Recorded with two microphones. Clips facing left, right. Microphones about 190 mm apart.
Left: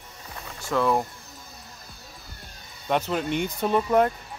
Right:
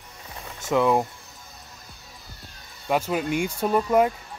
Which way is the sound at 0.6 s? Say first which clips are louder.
Right 3 dB; 15° right (ahead or behind).